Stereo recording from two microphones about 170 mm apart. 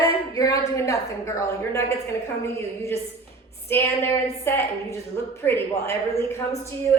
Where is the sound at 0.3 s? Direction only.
20° left (ahead or behind).